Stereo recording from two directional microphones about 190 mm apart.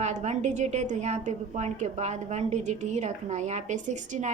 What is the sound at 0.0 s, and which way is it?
A woman's voice, 35° right (ahead or behind).